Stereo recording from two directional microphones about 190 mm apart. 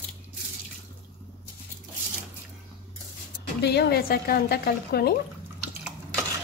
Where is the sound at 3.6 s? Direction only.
60° left (ahead or behind).